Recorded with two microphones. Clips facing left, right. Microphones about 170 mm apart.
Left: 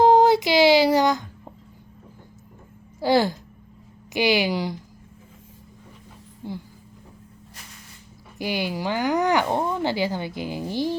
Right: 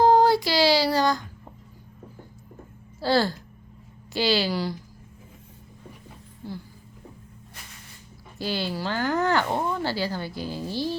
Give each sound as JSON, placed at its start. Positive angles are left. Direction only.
{"t": 0.0, "sound": "speech", "side_deg": 20}
{"t": 3.0, "sound": "speech", "side_deg": 15}
{"t": 6.4, "sound": "speech", "side_deg": 20}
{"t": 8.4, "sound": "speech", "side_deg": 15}